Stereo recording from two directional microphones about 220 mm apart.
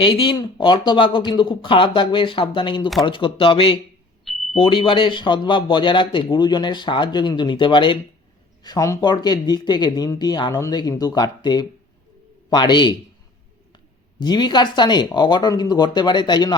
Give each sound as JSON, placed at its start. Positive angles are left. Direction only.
{"t": 0.0, "sound": "a man's voice", "side_deg": 25}